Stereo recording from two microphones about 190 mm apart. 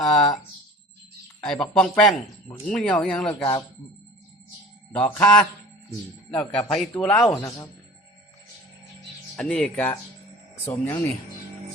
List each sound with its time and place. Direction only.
0.0 s speech: centre (ahead or behind)
1.4 s speech: 5° left (ahead or behind)
4.9 s speech: 5° left (ahead or behind)
7.3 s speech: 15° left (ahead or behind)
9.3 s speech: 5° left (ahead or behind)